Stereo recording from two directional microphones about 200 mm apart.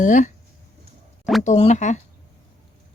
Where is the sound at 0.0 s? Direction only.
40° left (ahead or behind).